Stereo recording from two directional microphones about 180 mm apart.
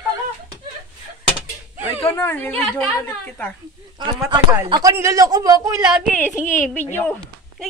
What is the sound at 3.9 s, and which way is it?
A man's voice, 25° right (ahead or behind).